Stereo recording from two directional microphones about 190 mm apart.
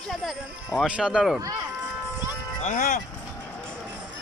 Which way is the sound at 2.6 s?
45° left (ahead or behind).